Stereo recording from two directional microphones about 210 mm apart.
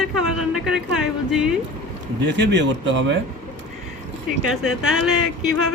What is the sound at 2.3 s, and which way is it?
Speech, 55° right (ahead or behind).